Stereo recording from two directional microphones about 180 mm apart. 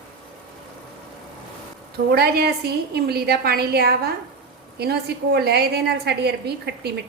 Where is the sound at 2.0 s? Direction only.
60° right (ahead or behind).